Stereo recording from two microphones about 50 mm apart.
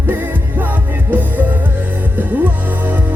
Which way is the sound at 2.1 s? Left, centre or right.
Right.